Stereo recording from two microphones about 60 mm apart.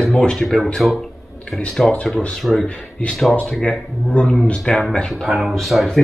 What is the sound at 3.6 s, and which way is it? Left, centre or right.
Speech, left.